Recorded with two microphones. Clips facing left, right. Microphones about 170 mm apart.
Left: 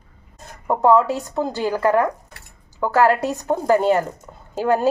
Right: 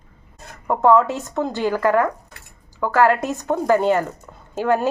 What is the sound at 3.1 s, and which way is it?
Speech, 35° left (ahead or behind).